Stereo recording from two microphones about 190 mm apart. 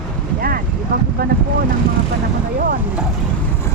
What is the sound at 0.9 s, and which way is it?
Speech, 50° right (ahead or behind).